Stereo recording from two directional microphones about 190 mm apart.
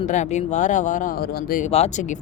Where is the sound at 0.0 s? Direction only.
40° left (ahead or behind).